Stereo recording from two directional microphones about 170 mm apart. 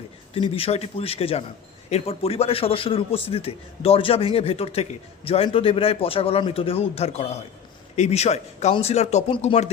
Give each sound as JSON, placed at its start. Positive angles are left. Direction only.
{"t": 0.3, "sound": "a man's voice", "side_deg": 35}